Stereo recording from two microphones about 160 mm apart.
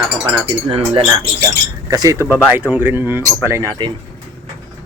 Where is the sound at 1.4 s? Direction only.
25° right (ahead or behind).